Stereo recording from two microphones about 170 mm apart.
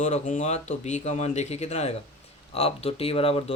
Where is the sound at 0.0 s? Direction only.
45° left (ahead or behind).